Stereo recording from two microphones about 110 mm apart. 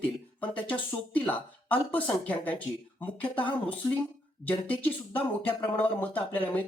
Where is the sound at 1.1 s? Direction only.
15° left (ahead or behind).